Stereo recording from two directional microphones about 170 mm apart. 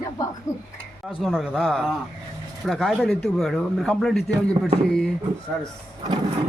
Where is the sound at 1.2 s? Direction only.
5° right (ahead or behind).